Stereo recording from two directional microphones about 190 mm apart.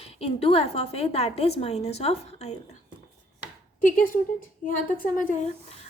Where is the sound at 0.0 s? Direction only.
30° left (ahead or behind).